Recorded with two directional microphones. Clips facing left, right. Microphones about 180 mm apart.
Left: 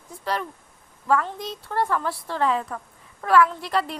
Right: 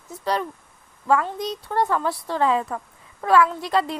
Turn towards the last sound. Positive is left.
turn(degrees=-20)  # may be behind; listen again after turning